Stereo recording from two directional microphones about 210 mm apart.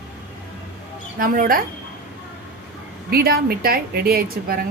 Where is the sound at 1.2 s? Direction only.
40° right (ahead or behind).